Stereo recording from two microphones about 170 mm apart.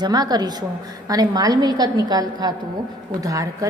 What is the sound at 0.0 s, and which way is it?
A woman's voice, 25° right (ahead or behind).